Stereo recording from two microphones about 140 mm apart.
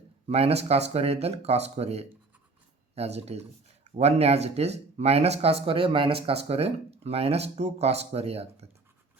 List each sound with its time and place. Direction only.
0.3 s speech: 45° right (ahead or behind)